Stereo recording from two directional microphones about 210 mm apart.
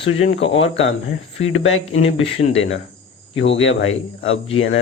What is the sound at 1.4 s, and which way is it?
Speech, 75° left (ahead or behind).